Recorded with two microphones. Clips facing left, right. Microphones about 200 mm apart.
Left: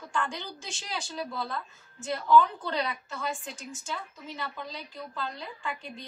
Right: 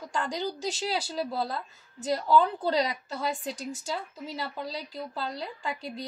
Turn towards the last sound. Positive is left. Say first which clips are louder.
# right 3 dB
turn(degrees=-35)  # may be behind; listen again after turning